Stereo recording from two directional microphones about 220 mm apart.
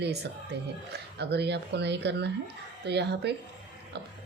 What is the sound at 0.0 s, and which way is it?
Speech, 50° right (ahead or behind).